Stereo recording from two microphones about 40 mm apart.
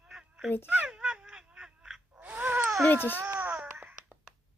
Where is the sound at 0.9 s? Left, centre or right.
Right.